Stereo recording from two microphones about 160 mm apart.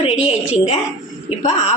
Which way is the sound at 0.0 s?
40° left (ahead or behind).